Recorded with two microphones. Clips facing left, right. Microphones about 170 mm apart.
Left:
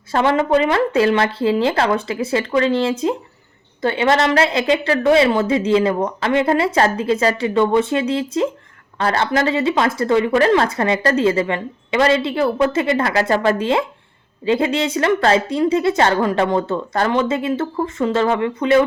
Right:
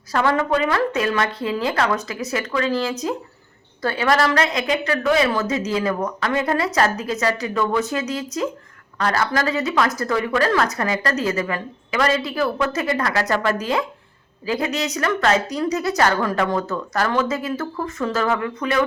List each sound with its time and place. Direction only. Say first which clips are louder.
0.1 s speech: left 4 dB; 25° left (ahead or behind)